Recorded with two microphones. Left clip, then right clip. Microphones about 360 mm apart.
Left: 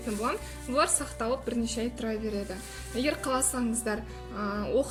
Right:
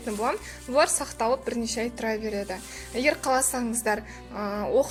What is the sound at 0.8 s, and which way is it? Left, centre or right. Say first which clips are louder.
A woman's voice: right 5 dB; centre.